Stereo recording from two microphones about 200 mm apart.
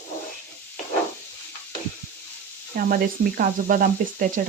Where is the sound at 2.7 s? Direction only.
50° right (ahead or behind).